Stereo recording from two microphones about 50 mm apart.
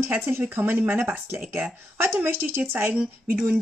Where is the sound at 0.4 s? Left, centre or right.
Right.